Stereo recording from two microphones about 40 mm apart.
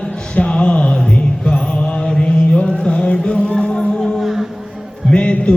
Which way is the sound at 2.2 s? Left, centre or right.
Left.